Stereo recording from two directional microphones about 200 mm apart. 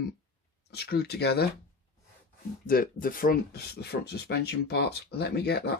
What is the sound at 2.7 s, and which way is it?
Speech, 45° left (ahead or behind).